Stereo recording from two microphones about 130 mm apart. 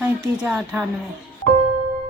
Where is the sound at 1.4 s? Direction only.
60° left (ahead or behind).